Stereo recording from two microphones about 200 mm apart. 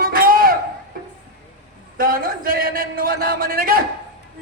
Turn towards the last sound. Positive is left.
turn(degrees=-45)  # may be behind; listen again after turning